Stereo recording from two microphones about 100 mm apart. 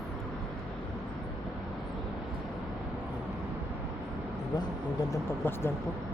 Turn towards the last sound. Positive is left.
turn(degrees=20)  # may be behind; listen again after turning